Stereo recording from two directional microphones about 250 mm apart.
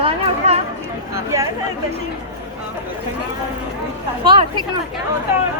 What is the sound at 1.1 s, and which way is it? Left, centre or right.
Speech, centre.